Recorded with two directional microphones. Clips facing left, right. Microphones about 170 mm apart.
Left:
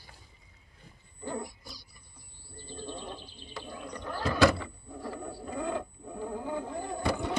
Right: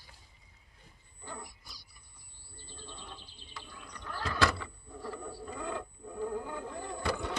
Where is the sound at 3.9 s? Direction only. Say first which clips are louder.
Left 5 dB; 25° left (ahead or behind).